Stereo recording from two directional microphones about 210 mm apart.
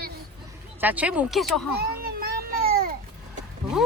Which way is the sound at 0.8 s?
5° right (ahead or behind).